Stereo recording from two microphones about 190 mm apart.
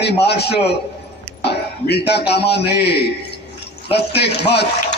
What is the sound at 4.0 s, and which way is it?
Speech, 60° left (ahead or behind).